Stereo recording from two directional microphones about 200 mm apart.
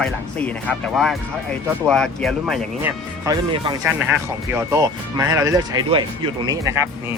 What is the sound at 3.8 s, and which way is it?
Speech, 10° right (ahead or behind).